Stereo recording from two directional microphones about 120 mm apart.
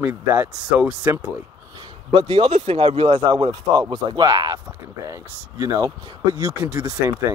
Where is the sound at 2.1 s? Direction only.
45° right (ahead or behind); by 5.9 s 25° right (ahead or behind).